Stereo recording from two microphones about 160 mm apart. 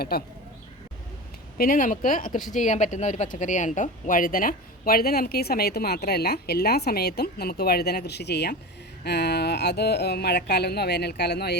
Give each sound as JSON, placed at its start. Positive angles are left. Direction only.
{"t": 1.5, "sound": "speech", "side_deg": 65}